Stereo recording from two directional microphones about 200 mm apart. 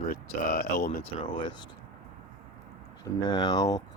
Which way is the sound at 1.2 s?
25° left (ahead or behind).